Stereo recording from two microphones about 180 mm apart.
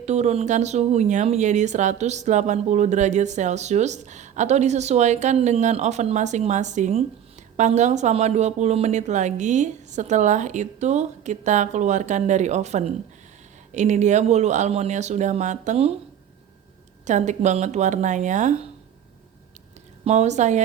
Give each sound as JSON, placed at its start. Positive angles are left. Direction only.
{"t": 0.0, "sound": "speech", "side_deg": -40}
{"t": 17.1, "sound": "speech", "side_deg": -40}
{"t": 20.1, "sound": "speech", "side_deg": -40}